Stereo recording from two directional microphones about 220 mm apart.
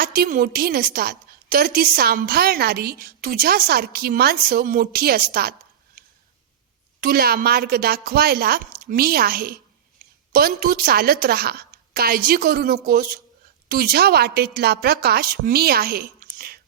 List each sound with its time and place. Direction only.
0.0 s a woman's voice: 45° right (ahead or behind)
7.0 s a woman's voice: 45° right (ahead or behind)